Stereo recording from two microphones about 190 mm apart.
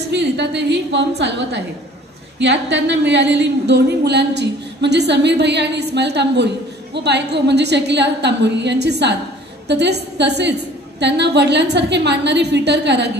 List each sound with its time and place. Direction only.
0.1 s a woman's voice: 65° right (ahead or behind)